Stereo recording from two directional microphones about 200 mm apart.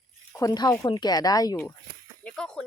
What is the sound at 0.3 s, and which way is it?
Speech, 20° left (ahead or behind).